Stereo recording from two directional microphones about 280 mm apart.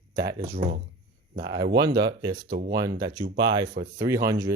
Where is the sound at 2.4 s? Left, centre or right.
Right.